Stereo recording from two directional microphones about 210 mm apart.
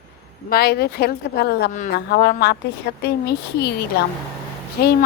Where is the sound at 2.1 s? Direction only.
50° left (ahead or behind).